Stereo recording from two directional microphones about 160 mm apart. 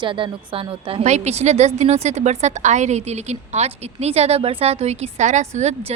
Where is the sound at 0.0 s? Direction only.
30° right (ahead or behind).